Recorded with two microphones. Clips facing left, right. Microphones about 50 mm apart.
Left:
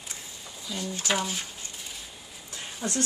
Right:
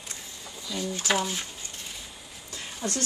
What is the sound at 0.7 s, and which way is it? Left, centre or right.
Speech, centre.